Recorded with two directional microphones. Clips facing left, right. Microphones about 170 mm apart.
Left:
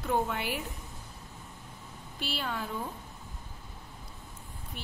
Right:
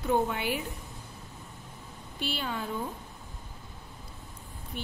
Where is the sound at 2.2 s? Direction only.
Centre (ahead or behind).